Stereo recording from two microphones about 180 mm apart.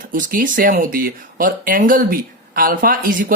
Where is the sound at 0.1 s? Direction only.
50° right (ahead or behind).